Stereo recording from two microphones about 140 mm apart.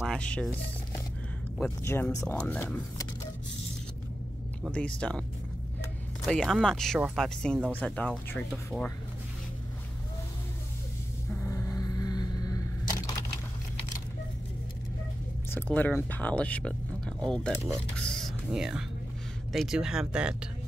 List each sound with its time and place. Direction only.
0.0 s speech: 5° left (ahead or behind)
1.6 s speech: 15° left (ahead or behind)
4.7 s speech: 5° left (ahead or behind)
6.2 s speech: 5° left (ahead or behind)
11.4 s a sound: 20° left (ahead or behind)
15.5 s speech: 15° left (ahead or behind)
17.9 s a sound: 5° left (ahead or behind)
18.5 s speech: 5° right (ahead or behind)